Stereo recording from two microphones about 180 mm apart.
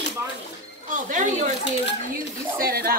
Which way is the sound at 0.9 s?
45° right (ahead or behind).